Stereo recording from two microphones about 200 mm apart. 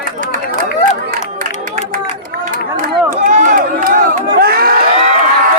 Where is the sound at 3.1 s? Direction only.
35° right (ahead or behind).